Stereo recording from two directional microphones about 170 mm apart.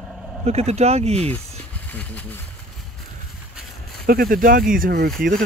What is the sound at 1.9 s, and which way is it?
Speech, 10° left (ahead or behind).